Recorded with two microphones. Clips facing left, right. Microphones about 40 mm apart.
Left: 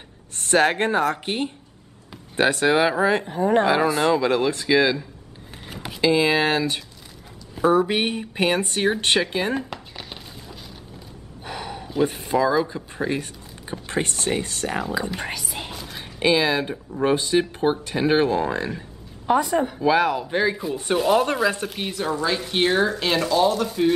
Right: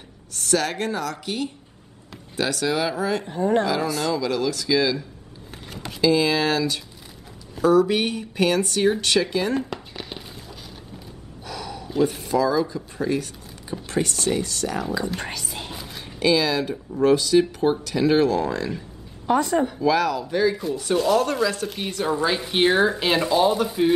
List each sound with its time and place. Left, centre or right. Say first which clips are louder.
0.3 s speech: left 5 dB; left
3.4 s speech: left 2 dB; left
3.7 s speech: left 5 dB; left
5.7 s a sound: left 1 dB; centre
5.9 s speech: left 1 dB; left
9.5 s a sound: right 1 dB; centre
11.4 s a sound: left 1 dB; left
12.0 s speech: even; left
15.1 s whispering: left 1 dB; centre
16.2 s speech: left 1 dB; left
19.2 s a woman's voice: even; centre
19.8 s speech: left 1 dB; left
21.6 s speech: right 1 dB; centre
22.2 s speech: right 1 dB; centre